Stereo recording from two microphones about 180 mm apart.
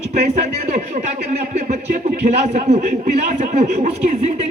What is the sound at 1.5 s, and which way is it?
A man's voice, 40° right (ahead or behind).